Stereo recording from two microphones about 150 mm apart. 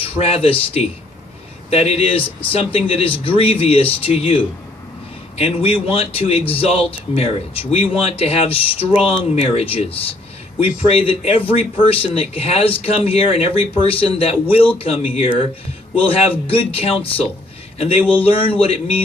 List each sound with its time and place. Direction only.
0.0 s a man's voice: 40° left (ahead or behind)
16.0 s a man's voice: 40° left (ahead or behind)
18.2 s a man's voice: 40° left (ahead or behind)